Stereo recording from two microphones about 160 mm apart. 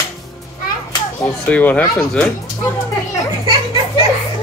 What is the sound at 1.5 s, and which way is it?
Speech, 10° left (ahead or behind).